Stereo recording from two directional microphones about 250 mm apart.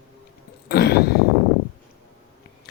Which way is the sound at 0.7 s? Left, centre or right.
Left.